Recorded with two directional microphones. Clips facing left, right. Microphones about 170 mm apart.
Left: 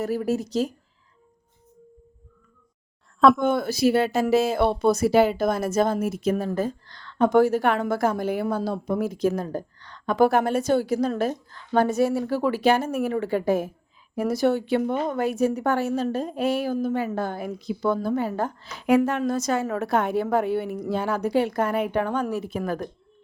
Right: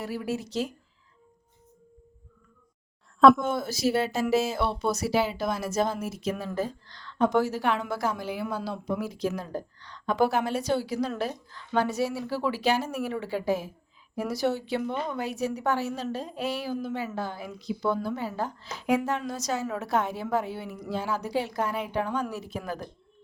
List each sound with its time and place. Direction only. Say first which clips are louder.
0.0 s speech: left 7 dB; 45° left (ahead or behind)
3.2 s speech: even; centre (ahead or behind)
3.4 s a woman's voice: left 6 dB; 60° left (ahead or behind)